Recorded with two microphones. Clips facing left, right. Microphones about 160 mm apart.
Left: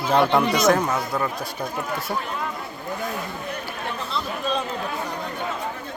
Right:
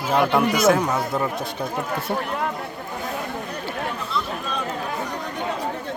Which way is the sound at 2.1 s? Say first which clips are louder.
Right 3 dB; 60° right (ahead or behind).